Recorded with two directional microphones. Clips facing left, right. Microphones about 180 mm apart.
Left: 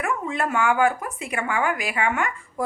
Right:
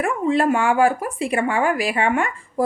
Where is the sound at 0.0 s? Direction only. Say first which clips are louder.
Right 7 dB; 30° right (ahead or behind).